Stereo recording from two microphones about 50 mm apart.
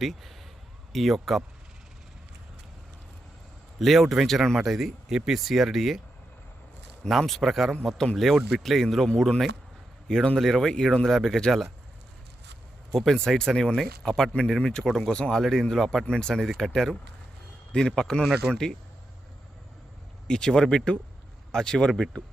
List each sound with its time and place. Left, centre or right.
0.0 s speech: centre
3.8 s speech: centre
7.1 s speech: centre
8.4 s speech: centre
8.6 s speech: centre
10.3 s speech: centre
12.9 s speech: centre
16.0 s speech: centre
20.2 s speech: centre